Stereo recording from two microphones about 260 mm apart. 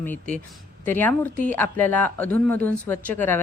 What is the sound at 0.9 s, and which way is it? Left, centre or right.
Speech, centre.